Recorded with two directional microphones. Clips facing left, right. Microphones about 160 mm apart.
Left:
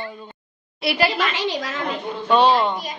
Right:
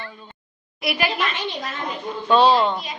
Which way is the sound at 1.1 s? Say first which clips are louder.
Left 3 dB; 90° left.